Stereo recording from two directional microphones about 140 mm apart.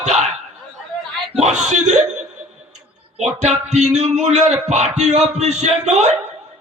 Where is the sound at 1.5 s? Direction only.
55° right (ahead or behind).